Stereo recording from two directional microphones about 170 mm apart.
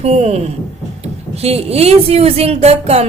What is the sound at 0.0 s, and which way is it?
Speech, 40° right (ahead or behind).